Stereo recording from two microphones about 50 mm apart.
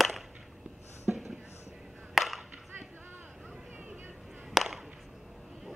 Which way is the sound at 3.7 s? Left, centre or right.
Right.